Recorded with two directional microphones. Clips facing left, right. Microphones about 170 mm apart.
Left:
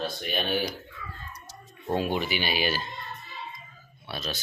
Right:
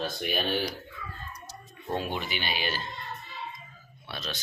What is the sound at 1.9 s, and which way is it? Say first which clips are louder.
Speech: left 5 dB; 10° left (ahead or behind).